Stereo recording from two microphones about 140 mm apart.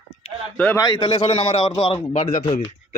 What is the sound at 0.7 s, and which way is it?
A man's voice, 30° left (ahead or behind).